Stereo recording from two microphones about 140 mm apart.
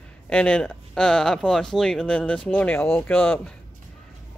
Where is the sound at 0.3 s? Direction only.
5° left (ahead or behind).